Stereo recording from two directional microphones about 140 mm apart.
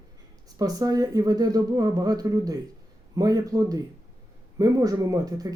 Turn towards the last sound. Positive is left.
turn(degrees=-25)  # may be behind; listen again after turning